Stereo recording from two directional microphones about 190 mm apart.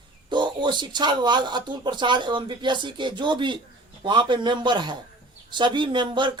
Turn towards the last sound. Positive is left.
turn(degrees=-25)  # may be behind; listen again after turning